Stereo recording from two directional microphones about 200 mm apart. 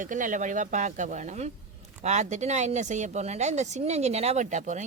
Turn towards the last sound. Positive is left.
turn(degrees=-35)  # may be behind; listen again after turning